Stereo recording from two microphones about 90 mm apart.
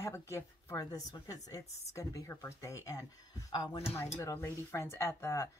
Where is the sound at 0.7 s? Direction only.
40° left (ahead or behind).